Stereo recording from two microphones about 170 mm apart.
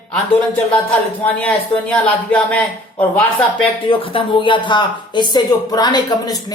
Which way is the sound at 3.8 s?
30° left (ahead or behind).